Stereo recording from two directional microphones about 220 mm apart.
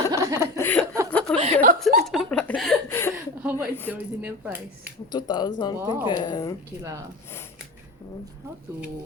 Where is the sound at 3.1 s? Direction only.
10° right (ahead or behind).